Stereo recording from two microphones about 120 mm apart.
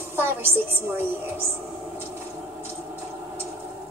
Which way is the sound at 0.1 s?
20° right (ahead or behind).